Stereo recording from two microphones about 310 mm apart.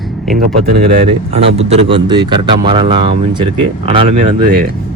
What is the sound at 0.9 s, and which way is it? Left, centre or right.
Speech, right.